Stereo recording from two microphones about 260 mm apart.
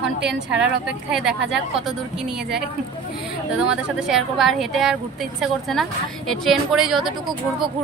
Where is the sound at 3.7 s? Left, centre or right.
Centre.